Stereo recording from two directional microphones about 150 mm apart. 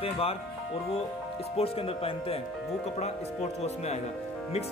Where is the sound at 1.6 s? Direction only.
40° left (ahead or behind).